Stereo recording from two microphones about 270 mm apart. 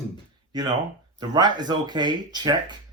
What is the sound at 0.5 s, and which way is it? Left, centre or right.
Speech, centre.